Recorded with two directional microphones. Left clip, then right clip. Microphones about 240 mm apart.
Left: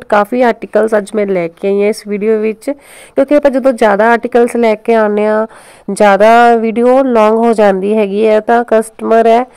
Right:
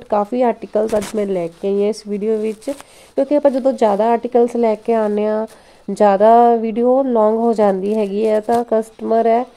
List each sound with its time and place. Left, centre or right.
0.1 s speech: centre